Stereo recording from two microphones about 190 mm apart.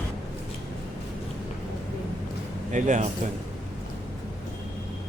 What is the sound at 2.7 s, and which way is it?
Speech, 40° right (ahead or behind).